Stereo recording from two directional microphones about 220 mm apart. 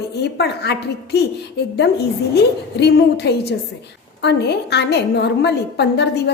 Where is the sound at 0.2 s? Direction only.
50° left (ahead or behind).